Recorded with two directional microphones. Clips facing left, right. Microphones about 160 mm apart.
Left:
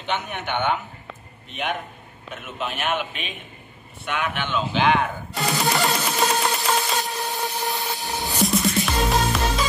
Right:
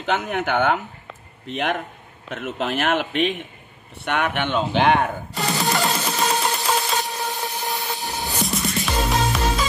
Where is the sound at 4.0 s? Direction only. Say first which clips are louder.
Right 4 dB; 70° right (ahead or behind).